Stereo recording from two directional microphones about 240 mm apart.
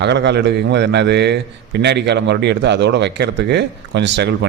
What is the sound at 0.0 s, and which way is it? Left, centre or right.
A man's voice, right.